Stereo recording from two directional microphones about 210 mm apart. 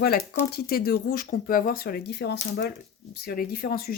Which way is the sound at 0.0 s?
45° left (ahead or behind).